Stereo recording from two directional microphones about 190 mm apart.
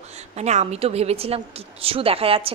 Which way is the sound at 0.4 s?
35° right (ahead or behind).